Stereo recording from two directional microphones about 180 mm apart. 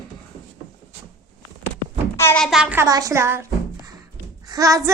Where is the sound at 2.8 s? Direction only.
20° right (ahead or behind).